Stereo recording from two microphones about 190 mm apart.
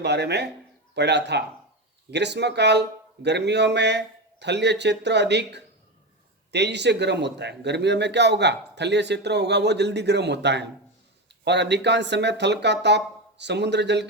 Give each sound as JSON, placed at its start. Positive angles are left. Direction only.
{"t": 0.0, "sound": "speech", "side_deg": -65}